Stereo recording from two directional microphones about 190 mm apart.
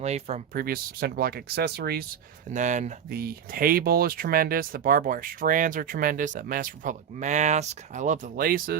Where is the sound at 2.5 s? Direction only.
40° right (ahead or behind).